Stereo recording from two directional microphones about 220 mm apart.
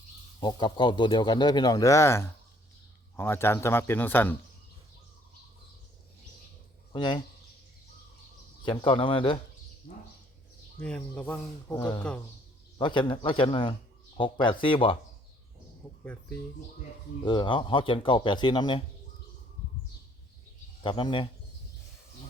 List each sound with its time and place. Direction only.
0.3 s speech: 20° left (ahead or behind)
6.9 s speech: 20° left (ahead or behind)
8.6 s speech: 20° left (ahead or behind)
10.8 s speech: 5° left (ahead or behind)
11.8 s speech: 20° left (ahead or behind)
17.2 s speech: 20° left (ahead or behind)
20.8 s speech: 20° left (ahead or behind)